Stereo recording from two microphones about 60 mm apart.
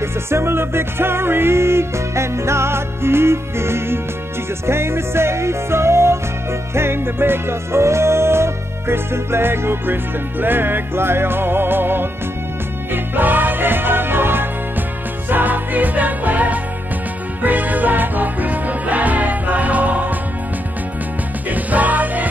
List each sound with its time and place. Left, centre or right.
0.0 s music: right
21.5 s music: right